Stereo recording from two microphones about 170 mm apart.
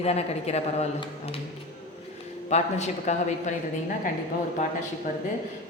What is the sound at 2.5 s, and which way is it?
Speech, 45° left (ahead or behind).